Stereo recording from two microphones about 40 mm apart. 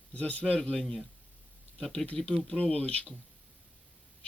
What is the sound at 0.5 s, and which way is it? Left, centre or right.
Speech, left.